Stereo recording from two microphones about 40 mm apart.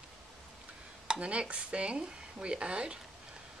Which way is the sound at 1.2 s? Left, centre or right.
Right.